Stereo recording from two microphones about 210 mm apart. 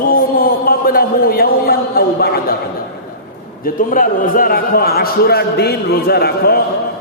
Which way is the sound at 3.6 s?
40° left (ahead or behind).